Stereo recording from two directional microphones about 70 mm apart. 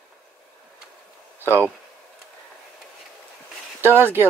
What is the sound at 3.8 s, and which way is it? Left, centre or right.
Speech, right.